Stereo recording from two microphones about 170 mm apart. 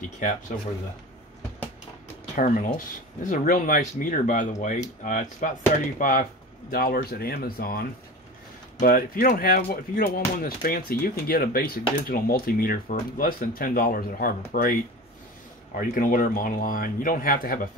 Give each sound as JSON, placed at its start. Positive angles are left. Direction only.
{"t": 2.3, "sound": "speech", "side_deg": 50}